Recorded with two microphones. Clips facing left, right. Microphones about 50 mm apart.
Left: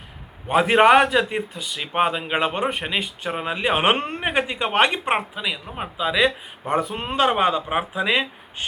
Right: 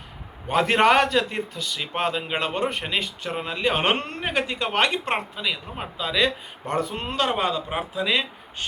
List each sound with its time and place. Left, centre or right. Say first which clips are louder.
0.4 s a man's voice: left 3 dB; centre
5.1 s a man's voice: left 2 dB; centre
7.2 s a man's voice: left 5 dB; left